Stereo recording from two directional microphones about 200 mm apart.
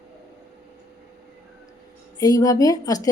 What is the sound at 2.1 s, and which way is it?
Speech, 15° left (ahead or behind).